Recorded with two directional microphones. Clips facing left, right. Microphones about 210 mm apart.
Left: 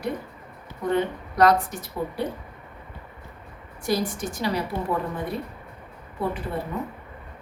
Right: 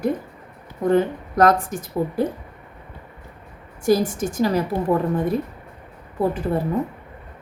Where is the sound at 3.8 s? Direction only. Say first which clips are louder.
Right 7 dB; 45° right (ahead or behind).